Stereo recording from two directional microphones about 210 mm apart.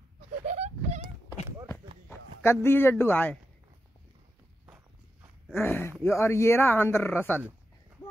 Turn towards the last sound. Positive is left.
turn(degrees=10)  # may be behind; listen again after turning